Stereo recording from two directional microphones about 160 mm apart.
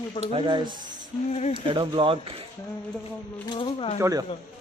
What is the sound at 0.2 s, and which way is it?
Speech, 30° right (ahead or behind).